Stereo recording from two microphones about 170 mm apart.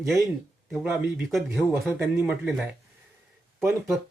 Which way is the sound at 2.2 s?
15° right (ahead or behind).